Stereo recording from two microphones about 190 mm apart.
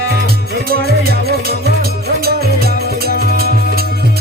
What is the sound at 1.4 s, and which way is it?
Music, 55° right (ahead or behind).